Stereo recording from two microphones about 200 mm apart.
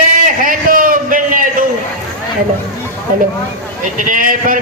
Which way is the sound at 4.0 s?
45° right (ahead or behind).